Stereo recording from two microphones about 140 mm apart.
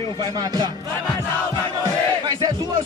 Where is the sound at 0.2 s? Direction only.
30° right (ahead or behind).